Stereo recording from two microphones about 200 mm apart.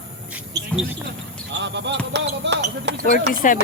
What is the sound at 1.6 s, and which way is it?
Speech, 60° right (ahead or behind).